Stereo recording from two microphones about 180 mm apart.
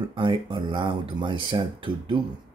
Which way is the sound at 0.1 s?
25° right (ahead or behind).